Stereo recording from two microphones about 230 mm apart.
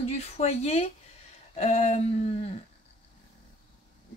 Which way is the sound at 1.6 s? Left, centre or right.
Left.